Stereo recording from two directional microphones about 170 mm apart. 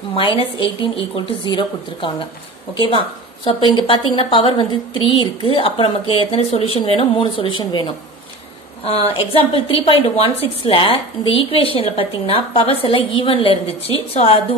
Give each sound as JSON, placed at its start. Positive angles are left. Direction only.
{"t": 0.1, "sound": "a woman's voice", "side_deg": 30}